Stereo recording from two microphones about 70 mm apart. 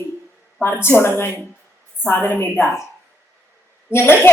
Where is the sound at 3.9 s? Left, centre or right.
Left.